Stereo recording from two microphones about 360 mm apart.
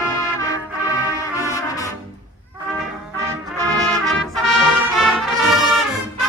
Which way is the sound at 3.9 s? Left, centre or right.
Centre.